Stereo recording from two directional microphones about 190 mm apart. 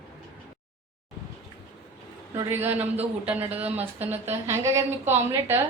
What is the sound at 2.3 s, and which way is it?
A woman's voice, 15° right (ahead or behind).